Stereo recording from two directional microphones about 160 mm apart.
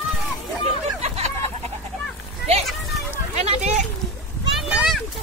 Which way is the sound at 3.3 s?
45° right (ahead or behind).